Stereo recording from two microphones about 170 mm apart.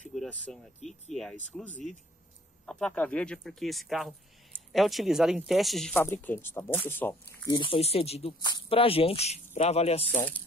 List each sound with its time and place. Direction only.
0.1 s a sound: centre (ahead or behind)
1.1 s a man's voice: 5° left (ahead or behind)
5.9 s speech: 10° left (ahead or behind)
7.4 s speech: 30° left (ahead or behind)